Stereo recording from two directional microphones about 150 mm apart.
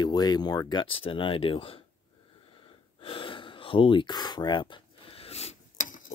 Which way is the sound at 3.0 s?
35° left (ahead or behind).